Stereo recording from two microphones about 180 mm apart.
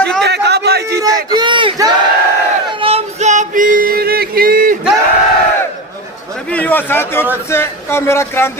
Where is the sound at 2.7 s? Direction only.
30° right (ahead or behind); by 4.7 s 55° right (ahead or behind).